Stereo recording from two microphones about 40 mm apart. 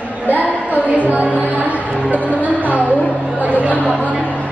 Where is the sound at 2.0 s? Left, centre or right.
Left.